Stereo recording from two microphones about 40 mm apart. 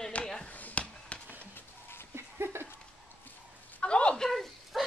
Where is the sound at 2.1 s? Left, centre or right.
Right.